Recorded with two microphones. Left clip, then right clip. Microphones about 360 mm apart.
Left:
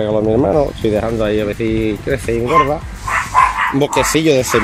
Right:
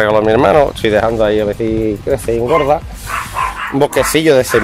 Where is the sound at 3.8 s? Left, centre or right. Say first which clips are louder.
Right 5 dB; right.